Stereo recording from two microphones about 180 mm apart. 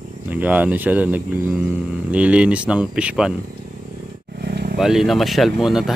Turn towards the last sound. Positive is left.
turn(degrees=0)  # may be behind; listen again after turning